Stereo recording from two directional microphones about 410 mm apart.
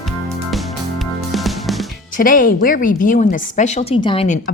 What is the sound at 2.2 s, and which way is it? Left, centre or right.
Speech, centre.